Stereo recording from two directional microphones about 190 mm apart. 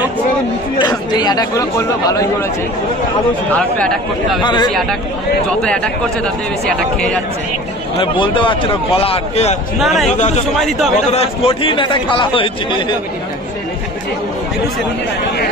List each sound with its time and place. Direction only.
0.7 s speech: 25° left (ahead or behind)
3.5 s speech: 5° left (ahead or behind)
4.4 s speech: 25° left (ahead or behind)
8.0 s speech: 25° left (ahead or behind)
9.8 s speech: centre (ahead or behind)
10.1 s a man's voice: 40° left (ahead or behind)